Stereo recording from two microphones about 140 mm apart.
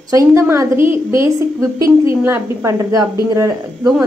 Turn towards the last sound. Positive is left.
turn(degrees=-25)  # may be behind; listen again after turning